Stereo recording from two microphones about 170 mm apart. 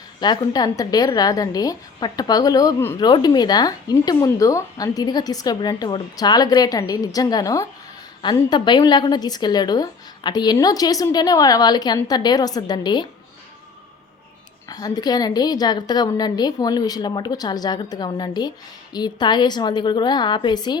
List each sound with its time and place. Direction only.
0.2 s a woman's voice: 25° left (ahead or behind)
14.7 s a woman's voice: 20° left (ahead or behind)